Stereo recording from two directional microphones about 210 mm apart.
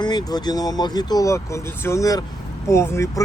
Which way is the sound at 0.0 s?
20° left (ahead or behind).